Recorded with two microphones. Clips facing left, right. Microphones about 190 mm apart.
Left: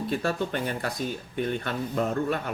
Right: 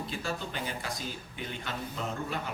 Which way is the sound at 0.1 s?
60° left (ahead or behind).